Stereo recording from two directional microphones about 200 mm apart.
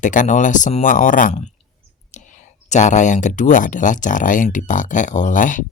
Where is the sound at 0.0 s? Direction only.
40° left (ahead or behind).